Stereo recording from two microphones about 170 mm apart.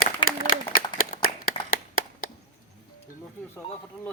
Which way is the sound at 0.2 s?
30° left (ahead or behind).